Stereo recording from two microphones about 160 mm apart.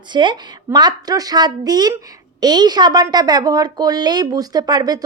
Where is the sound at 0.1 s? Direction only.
30° right (ahead or behind).